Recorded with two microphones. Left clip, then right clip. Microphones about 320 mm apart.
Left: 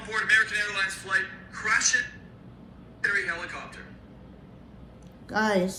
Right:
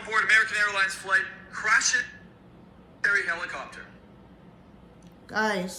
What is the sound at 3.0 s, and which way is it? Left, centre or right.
Speech, centre.